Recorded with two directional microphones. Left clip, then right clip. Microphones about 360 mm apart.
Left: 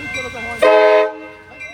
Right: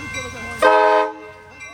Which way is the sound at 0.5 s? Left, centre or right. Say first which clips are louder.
Left 3 dB; centre.